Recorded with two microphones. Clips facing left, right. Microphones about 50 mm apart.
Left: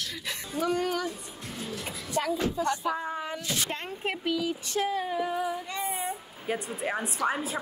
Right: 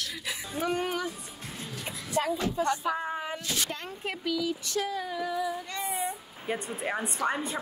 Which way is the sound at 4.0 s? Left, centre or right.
Left.